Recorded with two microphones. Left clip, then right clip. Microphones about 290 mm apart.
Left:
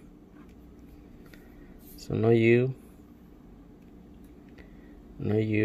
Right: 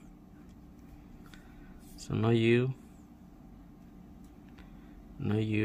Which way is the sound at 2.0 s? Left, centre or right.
Centre.